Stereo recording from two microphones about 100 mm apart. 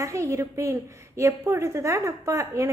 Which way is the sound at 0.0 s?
30° right (ahead or behind).